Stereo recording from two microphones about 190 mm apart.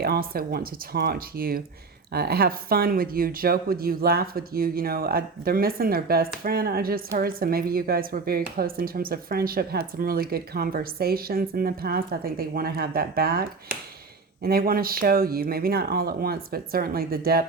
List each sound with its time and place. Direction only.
0.0 s speech: 55° right (ahead or behind)